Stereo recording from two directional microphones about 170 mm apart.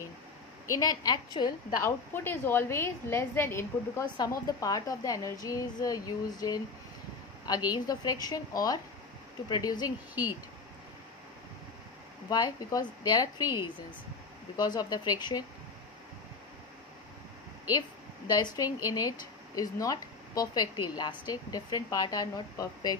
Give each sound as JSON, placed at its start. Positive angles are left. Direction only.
{"t": 0.7, "sound": "a woman's voice", "side_deg": 20}
{"t": 12.3, "sound": "a woman's voice", "side_deg": 25}
{"t": 17.6, "sound": "a woman's voice", "side_deg": 20}